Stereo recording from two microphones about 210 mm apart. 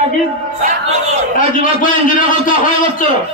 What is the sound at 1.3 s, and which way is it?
A man's voice, 40° left (ahead or behind).